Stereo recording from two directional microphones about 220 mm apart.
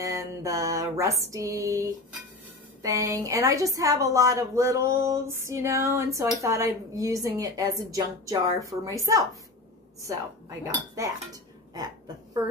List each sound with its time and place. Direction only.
0.0 s a woman's voice: 15° right (ahead or behind)
11.0 s speech: 15° right (ahead or behind)